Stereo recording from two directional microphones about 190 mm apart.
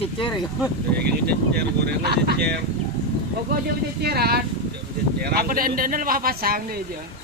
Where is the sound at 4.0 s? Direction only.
55° right (ahead or behind).